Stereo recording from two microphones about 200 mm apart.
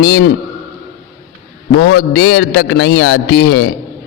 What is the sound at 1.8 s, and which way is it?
A man's voice, 55° left (ahead or behind).